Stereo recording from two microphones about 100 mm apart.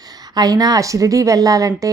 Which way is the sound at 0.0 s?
40° right (ahead or behind).